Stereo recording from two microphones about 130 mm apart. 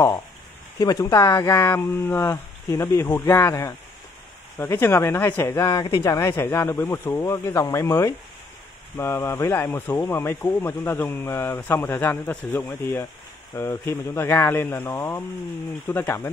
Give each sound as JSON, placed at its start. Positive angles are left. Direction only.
{"t": 0.7, "sound": "speech", "side_deg": 30}
{"t": 5.7, "sound": "speech", "side_deg": 35}